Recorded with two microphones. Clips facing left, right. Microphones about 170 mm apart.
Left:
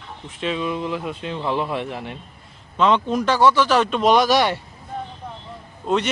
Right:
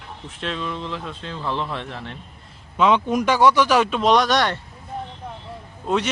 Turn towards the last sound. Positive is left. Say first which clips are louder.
# left 1 dB
turn(degrees=0)  # may be behind; listen again after turning